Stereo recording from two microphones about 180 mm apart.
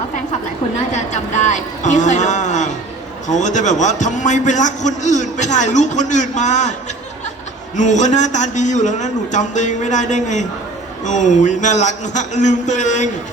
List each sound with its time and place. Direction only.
0.9 s a man's voice: 40° left (ahead or behind)
7.8 s a man's voice: 40° left (ahead or behind)